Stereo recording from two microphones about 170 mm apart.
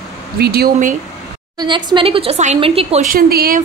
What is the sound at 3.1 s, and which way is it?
Speech, 60° right (ahead or behind).